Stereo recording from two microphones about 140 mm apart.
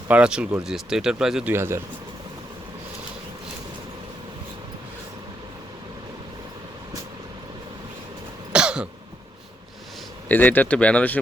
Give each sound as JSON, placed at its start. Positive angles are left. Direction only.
{"t": 0.1, "sound": "speech", "side_deg": -5}
{"t": 1.5, "sound": "speech", "side_deg": -20}
{"t": 8.5, "sound": "cough", "side_deg": -5}
{"t": 10.2, "sound": "speech", "side_deg": 10}